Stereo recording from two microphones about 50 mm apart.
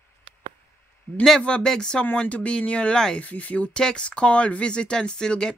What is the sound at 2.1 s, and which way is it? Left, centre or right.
Speech, left.